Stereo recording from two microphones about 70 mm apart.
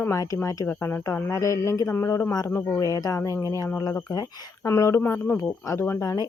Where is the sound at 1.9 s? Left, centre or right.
Left.